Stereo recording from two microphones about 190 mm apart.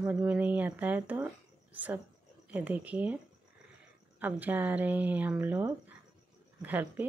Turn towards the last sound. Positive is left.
turn(degrees=-10)  # may be behind; listen again after turning